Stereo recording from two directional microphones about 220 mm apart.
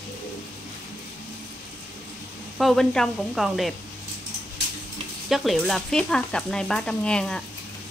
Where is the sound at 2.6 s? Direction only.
Centre (ahead or behind).